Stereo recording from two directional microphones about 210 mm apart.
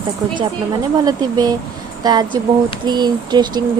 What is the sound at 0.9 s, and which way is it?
Speech, 20° right (ahead or behind).